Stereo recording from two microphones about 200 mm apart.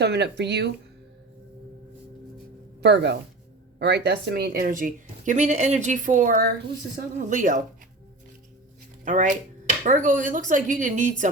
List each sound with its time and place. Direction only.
0.0 s speech: 55° right (ahead or behind)
2.8 s a woman's voice: 60° right (ahead or behind); by 7.6 s 40° right (ahead or behind)
9.0 s speech: 40° right (ahead or behind)